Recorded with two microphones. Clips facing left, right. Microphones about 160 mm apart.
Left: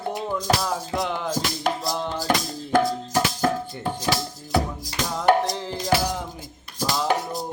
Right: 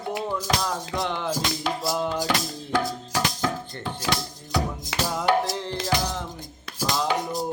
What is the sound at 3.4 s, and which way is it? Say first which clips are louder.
Chopping: left 6 dB; 50° left (ahead or behind).